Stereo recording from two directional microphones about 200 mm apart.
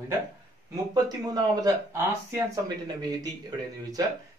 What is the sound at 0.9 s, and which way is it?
Speech, 20° right (ahead or behind).